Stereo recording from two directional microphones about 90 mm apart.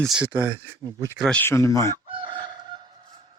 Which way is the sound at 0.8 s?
40° right (ahead or behind).